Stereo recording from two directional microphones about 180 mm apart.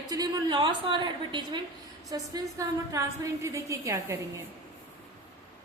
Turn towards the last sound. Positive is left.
turn(degrees=-15)  # may be behind; listen again after turning